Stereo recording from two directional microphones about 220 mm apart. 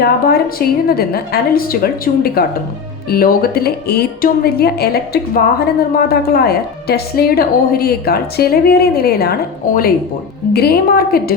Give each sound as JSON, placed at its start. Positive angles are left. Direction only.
{"t": 0.0, "sound": "a woman's voice", "side_deg": 45}
{"t": 10.5, "sound": "a woman's voice", "side_deg": 45}